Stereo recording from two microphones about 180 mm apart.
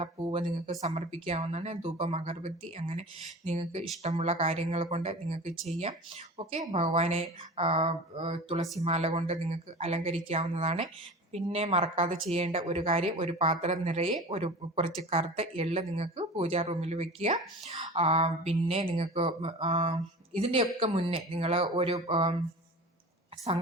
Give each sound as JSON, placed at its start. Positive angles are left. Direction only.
{"t": 0.0, "sound": "a woman's voice", "side_deg": -30}